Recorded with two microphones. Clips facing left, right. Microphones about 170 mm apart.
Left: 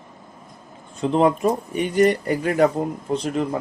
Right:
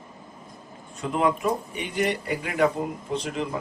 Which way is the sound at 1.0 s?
30° left (ahead or behind).